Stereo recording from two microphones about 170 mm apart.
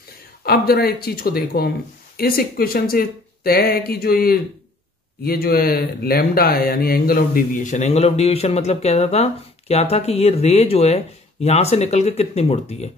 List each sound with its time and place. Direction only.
0.4 s speech: 65° left (ahead or behind); by 12.9 s 40° left (ahead or behind)